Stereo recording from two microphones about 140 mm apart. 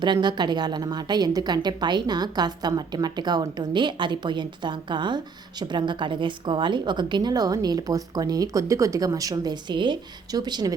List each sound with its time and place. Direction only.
0.0 s a woman's voice: 30° right (ahead or behind)